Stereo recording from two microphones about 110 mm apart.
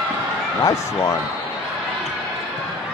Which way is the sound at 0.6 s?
30° left (ahead or behind).